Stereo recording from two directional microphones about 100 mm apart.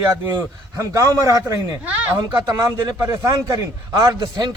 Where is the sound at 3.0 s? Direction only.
30° right (ahead or behind).